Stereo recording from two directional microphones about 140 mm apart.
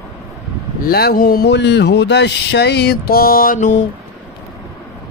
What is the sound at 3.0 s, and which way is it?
Mantra, 90° left.